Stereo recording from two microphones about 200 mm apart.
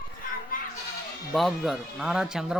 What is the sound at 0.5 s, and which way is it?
Children playing, 45° left (ahead or behind).